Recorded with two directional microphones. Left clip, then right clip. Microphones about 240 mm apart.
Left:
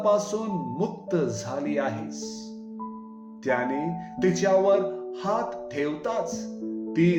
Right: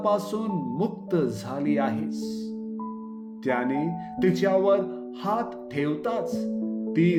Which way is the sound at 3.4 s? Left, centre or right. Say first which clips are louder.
Even; right.